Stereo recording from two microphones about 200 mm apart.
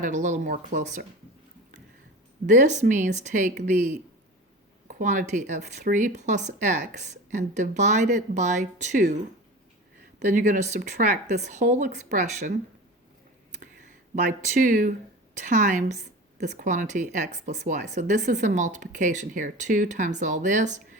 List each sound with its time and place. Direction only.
0.0 s speech: 40° right (ahead or behind)
2.5 s speech: 35° right (ahead or behind)
10.2 s speech: 40° right (ahead or behind)
13.5 s a sound: 40° right (ahead or behind)
15.4 s speech: 40° right (ahead or behind)